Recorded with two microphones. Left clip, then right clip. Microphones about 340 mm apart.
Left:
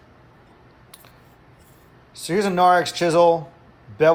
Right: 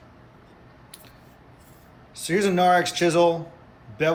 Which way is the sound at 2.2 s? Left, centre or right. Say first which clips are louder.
Left 3 dB; centre.